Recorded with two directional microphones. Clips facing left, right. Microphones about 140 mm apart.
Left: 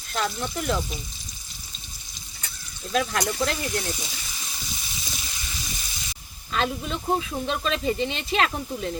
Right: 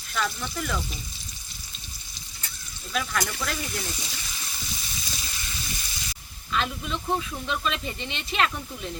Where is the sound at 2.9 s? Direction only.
35° left (ahead or behind).